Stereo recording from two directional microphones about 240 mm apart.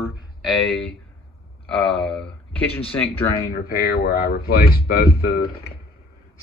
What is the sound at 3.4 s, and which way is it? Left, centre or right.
Speech, left.